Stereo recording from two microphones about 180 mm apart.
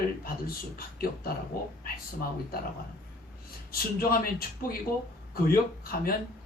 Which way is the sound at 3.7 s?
55° left (ahead or behind).